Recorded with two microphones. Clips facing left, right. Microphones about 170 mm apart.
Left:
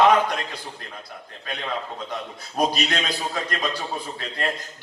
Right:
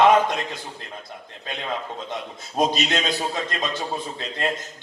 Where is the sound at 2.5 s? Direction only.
20° right (ahead or behind).